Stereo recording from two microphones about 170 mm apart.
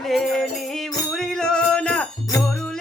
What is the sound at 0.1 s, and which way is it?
Music, centre (ahead or behind).